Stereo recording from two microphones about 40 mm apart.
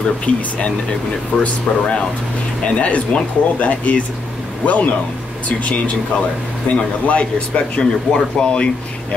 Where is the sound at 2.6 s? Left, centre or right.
Left.